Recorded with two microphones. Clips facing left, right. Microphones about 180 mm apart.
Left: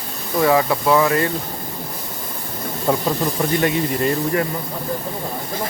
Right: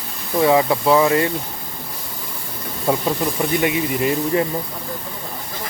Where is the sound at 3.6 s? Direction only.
10° right (ahead or behind).